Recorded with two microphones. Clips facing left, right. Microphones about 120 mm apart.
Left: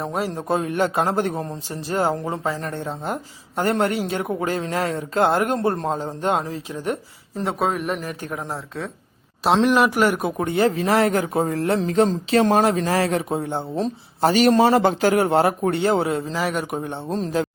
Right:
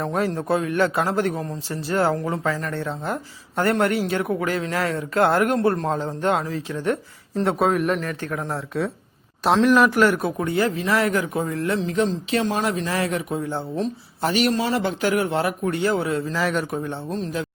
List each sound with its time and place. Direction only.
0.0 s a man's voice: 15° left (ahead or behind); by 2.7 s 30° left (ahead or behind)
2.7 s speech: 15° left (ahead or behind)
7.3 s a man's voice: centre (ahead or behind)
8.2 s a man's voice: 15° left (ahead or behind)
8.4 s a man's voice: centre (ahead or behind)
10.3 s speech: 25° left (ahead or behind); by 12.6 s 50° left (ahead or behind)
12.6 s speech: 35° left (ahead or behind)
16.3 s a man's voice: 10° left (ahead or behind)
17.1 s speech: 35° left (ahead or behind)